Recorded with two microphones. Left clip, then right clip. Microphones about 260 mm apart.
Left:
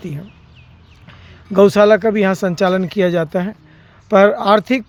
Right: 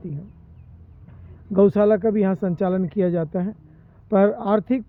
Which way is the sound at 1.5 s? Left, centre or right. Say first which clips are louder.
Left 7 dB; centre.